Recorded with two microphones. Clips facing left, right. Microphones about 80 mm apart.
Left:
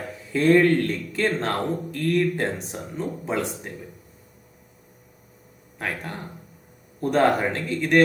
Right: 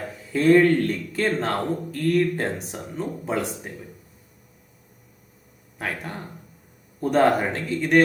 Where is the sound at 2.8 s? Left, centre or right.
Right.